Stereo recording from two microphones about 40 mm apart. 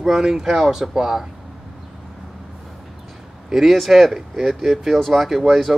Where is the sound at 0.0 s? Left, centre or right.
Centre.